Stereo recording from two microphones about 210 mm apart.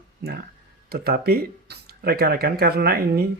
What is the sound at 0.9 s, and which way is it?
Speech, 45° right (ahead or behind).